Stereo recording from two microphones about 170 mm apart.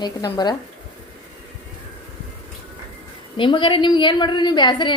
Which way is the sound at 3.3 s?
30° left (ahead or behind).